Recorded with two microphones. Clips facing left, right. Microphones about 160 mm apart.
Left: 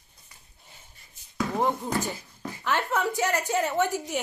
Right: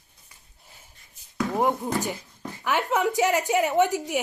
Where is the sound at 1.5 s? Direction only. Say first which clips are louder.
Right 2 dB; 15° right (ahead or behind).